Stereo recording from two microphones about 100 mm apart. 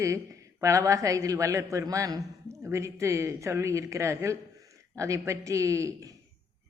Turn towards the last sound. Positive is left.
turn(degrees=-35)  # may be behind; listen again after turning